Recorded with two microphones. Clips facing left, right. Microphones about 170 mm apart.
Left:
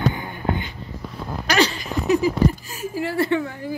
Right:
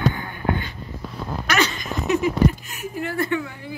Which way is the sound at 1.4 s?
30° left (ahead or behind).